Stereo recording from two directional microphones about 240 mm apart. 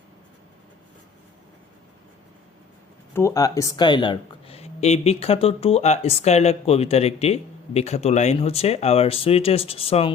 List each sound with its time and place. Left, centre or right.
3.1 s speech: centre